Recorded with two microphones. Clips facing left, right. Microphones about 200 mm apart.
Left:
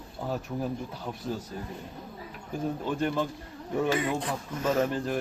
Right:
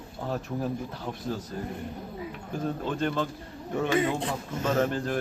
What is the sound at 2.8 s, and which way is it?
Speech, 10° left (ahead or behind).